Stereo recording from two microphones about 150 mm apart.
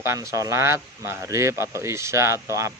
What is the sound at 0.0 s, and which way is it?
Speech, 20° right (ahead or behind).